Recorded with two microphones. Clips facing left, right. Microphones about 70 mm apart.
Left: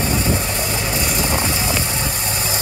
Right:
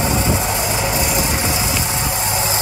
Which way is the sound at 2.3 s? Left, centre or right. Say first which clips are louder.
Right 4 dB; right.